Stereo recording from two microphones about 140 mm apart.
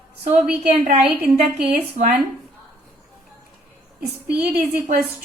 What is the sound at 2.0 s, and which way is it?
Speech, 60° right (ahead or behind).